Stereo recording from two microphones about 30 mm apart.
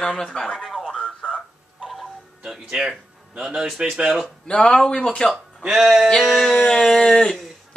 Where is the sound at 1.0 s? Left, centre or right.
Left.